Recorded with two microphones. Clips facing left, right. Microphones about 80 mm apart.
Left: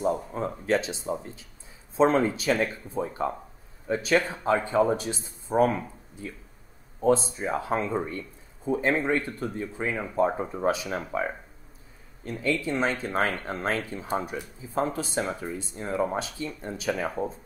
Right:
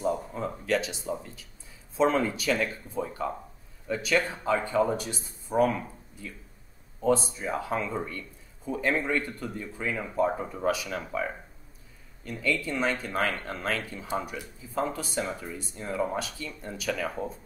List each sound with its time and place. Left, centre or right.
0.0 s a sound: left
0.7 s speech: left
12.3 s speech: left